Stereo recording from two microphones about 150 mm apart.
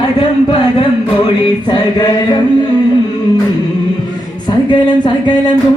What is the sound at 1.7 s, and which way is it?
Mantra, 30° left (ahead or behind).